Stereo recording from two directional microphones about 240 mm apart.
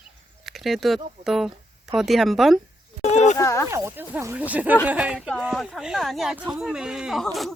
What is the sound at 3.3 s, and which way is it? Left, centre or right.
Speech, centre.